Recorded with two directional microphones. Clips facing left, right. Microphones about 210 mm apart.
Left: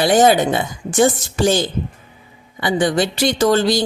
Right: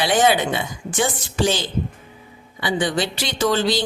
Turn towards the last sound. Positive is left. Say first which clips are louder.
# left 5 dB
turn(degrees=45)  # may be behind; listen again after turning